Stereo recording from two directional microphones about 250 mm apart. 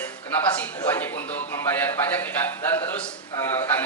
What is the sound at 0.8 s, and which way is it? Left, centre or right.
A man's voice, centre.